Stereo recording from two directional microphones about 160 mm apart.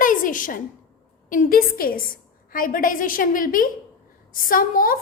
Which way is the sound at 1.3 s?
60° left (ahead or behind).